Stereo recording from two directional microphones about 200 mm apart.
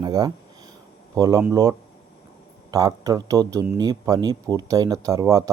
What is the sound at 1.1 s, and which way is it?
Speech, 15° right (ahead or behind).